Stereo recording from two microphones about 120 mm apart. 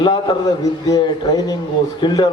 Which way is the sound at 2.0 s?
35° left (ahead or behind).